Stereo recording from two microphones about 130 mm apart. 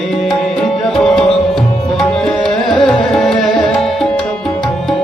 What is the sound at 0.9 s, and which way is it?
Tabla, 5° left (ahead or behind).